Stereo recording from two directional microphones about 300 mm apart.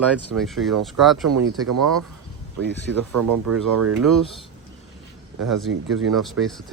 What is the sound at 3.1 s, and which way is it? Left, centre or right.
Speech, right.